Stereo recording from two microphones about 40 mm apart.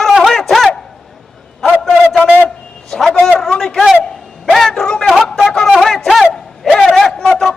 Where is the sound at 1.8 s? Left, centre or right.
Centre.